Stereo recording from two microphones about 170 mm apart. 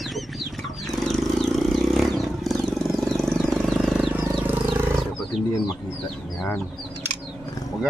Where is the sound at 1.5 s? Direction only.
Centre (ahead or behind).